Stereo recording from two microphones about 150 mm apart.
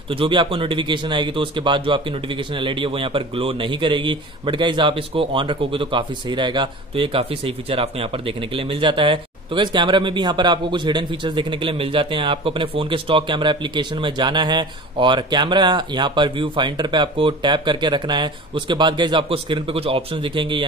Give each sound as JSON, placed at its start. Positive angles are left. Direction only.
{"t": 0.1, "sound": "speech", "side_deg": -35}